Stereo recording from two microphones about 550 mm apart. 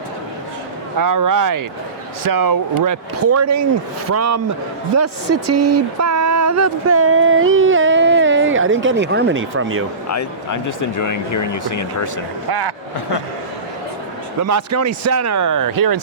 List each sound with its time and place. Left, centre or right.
0.9 s speech: right
10.1 s speech: left
12.5 s speech: right
14.4 s speech: right